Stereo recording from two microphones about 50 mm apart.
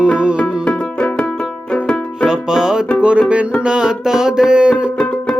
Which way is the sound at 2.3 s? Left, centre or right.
Centre.